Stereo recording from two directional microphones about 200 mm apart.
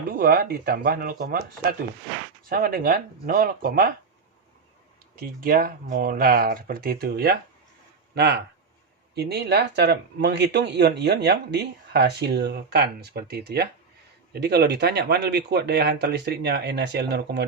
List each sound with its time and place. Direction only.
0.2 s speech: 50° right (ahead or behind)
5.1 s speech: 45° right (ahead or behind)